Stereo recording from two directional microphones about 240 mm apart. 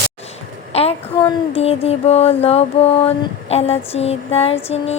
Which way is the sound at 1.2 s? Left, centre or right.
Left.